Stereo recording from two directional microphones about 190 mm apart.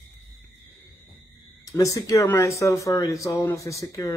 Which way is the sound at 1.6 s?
15° left (ahead or behind).